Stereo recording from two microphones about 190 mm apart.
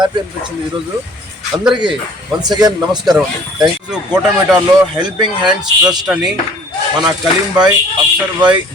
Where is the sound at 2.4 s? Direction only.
20° right (ahead or behind).